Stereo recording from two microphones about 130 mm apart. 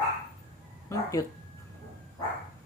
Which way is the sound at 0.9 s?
25° left (ahead or behind).